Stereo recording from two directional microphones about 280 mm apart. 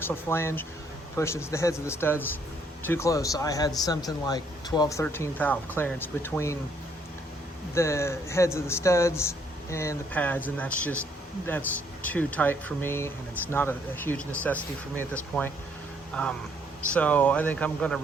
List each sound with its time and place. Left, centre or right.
0.0 s speech: centre
7.7 s speech: centre
12.0 s speech: centre
16.9 s speech: centre